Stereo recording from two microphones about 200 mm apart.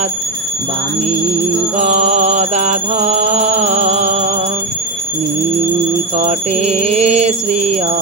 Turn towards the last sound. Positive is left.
turn(degrees=-30)  # may be behind; listen again after turning